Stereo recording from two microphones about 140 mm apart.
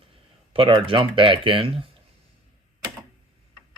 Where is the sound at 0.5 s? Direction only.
40° right (ahead or behind).